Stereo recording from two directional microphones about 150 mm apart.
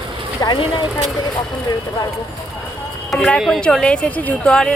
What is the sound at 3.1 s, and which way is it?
Speech, 10° left (ahead or behind).